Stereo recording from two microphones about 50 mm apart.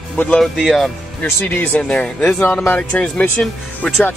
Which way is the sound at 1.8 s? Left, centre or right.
Left.